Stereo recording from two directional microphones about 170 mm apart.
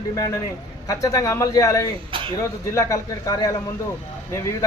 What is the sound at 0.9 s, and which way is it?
Speech, 20° left (ahead or behind).